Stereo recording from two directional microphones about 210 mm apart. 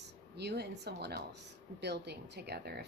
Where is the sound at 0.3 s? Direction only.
50° right (ahead or behind).